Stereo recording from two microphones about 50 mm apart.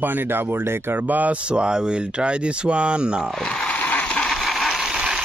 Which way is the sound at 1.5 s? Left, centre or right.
Centre.